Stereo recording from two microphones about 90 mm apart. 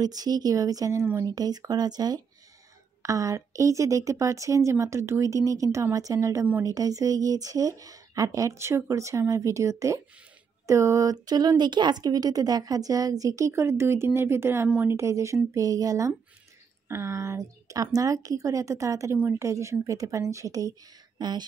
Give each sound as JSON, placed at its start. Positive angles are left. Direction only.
{"t": 0.0, "sound": "speech", "side_deg": -45}
{"t": 21.2, "sound": "speech", "side_deg": -50}